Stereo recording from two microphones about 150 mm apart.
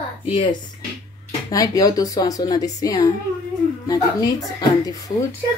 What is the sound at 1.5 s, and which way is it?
Speech, 25° left (ahead or behind).